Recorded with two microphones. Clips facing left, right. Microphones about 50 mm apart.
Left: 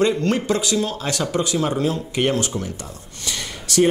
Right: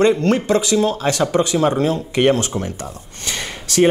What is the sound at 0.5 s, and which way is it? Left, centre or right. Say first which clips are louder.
Speech: right 5 dB; right.